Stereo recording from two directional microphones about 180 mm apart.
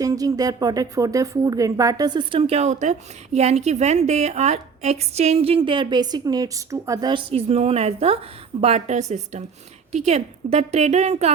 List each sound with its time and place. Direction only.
0.0 s a woman's voice: 20° right (ahead or behind); by 11.3 s 35° right (ahead or behind)